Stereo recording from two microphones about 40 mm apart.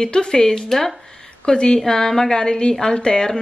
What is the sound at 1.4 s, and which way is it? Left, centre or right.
A woman's voice, left.